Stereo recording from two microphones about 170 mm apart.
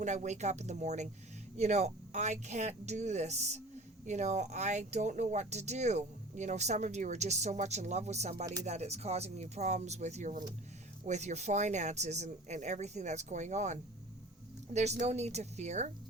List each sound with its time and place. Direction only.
0.0 s speech: 45° right (ahead or behind)